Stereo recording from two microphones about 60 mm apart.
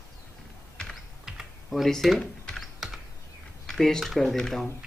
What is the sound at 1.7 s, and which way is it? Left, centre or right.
Speech, centre.